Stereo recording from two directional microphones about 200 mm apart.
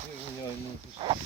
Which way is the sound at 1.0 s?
20° right (ahead or behind).